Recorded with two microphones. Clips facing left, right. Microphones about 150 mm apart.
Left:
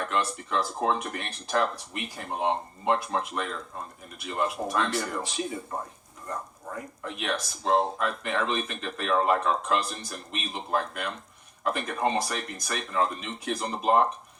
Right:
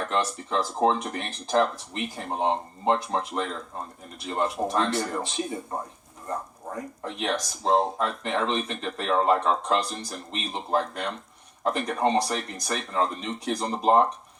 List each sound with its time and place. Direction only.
0.1 s speech: 30° right (ahead or behind)
7.0 s speech: 30° right (ahead or behind)